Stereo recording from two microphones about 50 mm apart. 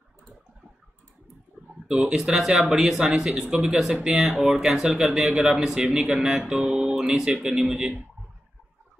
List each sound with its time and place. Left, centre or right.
1.9 s speech: centre